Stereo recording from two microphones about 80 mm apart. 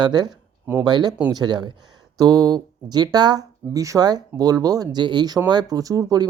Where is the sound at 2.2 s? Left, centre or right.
Right.